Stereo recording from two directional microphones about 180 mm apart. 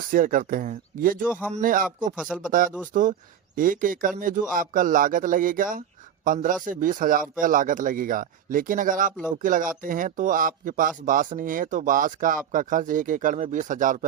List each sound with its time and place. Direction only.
0.1 s speech: 50° right (ahead or behind)
2.1 s speech: 5° right (ahead or behind)
2.5 s speech: 50° right (ahead or behind)